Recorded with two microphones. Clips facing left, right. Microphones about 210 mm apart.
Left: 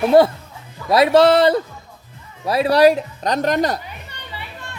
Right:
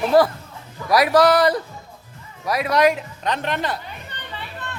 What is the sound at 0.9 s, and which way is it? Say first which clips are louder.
Speech: left 3 dB; 25° left (ahead or behind).